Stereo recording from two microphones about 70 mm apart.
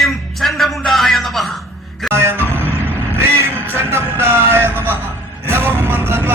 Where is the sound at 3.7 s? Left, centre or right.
Right.